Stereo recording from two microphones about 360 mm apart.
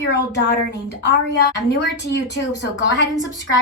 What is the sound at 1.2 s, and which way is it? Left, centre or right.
A woman's voice, left.